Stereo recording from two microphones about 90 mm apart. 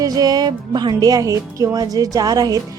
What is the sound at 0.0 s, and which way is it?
A woman's voice, 45° right (ahead or behind).